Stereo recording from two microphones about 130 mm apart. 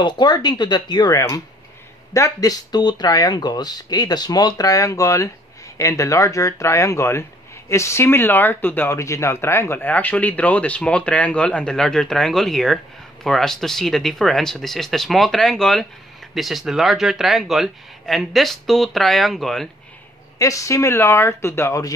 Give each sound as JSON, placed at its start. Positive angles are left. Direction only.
{"t": 0.0, "sound": "speech", "side_deg": 35}
{"t": 20.3, "sound": "speech", "side_deg": 25}